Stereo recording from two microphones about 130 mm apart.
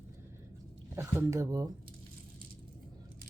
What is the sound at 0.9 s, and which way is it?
Speech, 20° right (ahead or behind).